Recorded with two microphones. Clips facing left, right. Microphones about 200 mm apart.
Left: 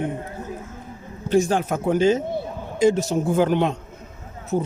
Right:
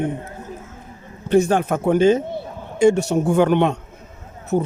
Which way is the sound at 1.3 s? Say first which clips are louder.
Right 3 dB; 60° right (ahead or behind).